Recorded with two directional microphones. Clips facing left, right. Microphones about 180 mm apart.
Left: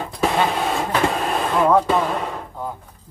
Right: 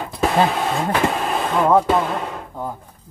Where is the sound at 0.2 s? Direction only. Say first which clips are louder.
Right 2 dB; centre (ahead or behind).